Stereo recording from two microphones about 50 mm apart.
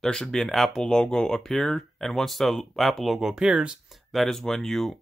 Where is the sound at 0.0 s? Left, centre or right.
Centre.